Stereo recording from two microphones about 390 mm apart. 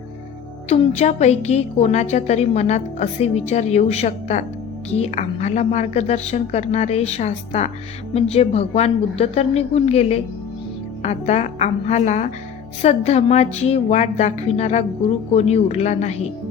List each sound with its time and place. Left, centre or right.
0.7 s a woman's voice: centre